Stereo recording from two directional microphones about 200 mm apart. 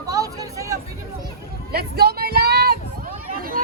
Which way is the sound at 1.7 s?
50° right (ahead or behind).